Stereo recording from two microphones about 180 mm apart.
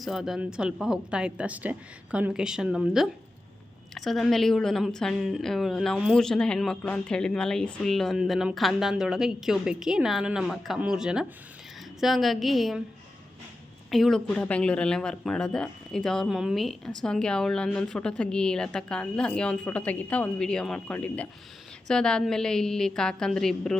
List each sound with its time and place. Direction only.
0.0 s speech: centre (ahead or behind)
13.9 s speech: centre (ahead or behind)